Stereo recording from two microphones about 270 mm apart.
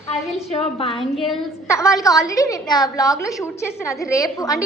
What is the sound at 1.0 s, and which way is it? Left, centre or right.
Speech, centre.